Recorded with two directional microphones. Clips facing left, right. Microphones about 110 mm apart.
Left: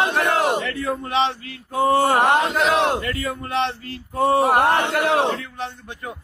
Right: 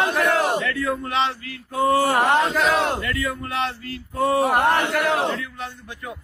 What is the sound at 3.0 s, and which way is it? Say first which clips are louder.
Speech: even; 40° left (ahead or behind).